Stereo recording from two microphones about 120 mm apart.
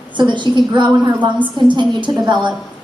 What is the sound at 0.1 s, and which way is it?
A woman's voice, 40° right (ahead or behind).